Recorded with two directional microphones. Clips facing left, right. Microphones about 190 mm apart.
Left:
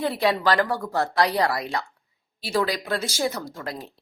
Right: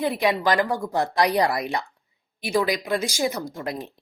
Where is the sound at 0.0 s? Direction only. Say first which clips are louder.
Even; 15° right (ahead or behind).